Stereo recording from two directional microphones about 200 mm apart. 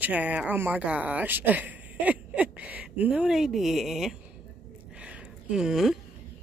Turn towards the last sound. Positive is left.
turn(degrees=0)  # may be behind; listen again after turning